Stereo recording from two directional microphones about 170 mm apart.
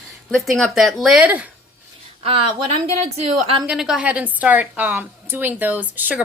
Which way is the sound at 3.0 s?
35° right (ahead or behind).